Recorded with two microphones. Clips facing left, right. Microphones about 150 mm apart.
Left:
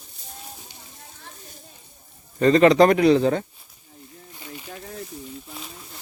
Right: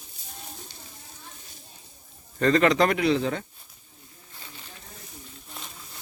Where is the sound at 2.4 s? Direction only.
25° left (ahead or behind); by 3.4 s 40° left (ahead or behind).